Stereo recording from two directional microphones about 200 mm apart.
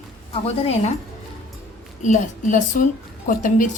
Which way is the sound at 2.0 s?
40° left (ahead or behind).